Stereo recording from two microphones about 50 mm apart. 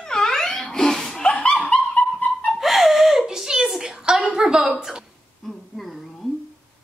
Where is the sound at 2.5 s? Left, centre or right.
Centre.